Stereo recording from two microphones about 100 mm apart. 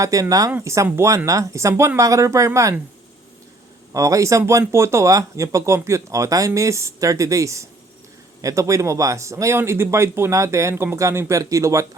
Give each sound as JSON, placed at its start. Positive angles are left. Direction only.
{"t": 0.0, "sound": "speech", "side_deg": -35}
{"t": 3.9, "sound": "speech", "side_deg": -30}